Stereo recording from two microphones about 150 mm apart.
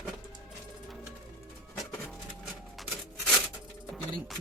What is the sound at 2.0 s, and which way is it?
Music, centre (ahead or behind).